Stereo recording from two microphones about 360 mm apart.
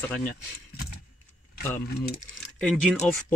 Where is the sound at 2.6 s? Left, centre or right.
Centre.